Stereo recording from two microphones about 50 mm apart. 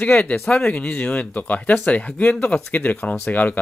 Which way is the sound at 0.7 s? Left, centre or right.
Left.